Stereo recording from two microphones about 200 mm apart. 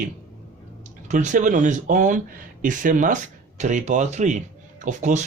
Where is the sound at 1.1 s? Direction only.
40° right (ahead or behind).